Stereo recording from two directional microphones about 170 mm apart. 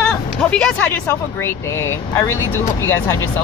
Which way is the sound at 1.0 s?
15° left (ahead or behind).